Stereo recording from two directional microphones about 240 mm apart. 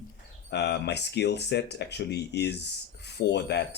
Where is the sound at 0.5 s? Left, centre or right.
Left.